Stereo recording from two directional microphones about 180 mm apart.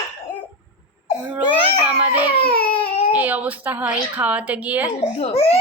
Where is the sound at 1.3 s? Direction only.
5° right (ahead or behind).